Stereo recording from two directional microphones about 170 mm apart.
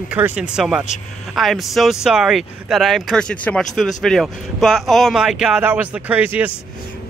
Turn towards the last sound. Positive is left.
turn(degrees=-10)  # may be behind; listen again after turning